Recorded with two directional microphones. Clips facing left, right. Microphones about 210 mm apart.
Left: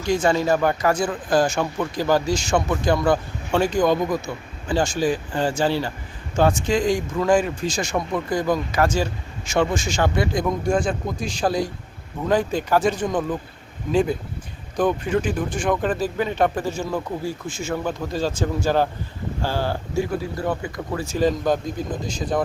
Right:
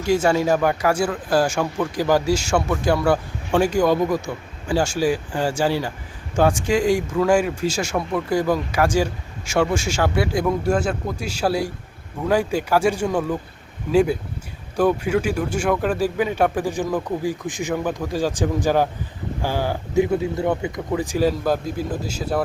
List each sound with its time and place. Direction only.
0.0 s speech: 10° right (ahead or behind)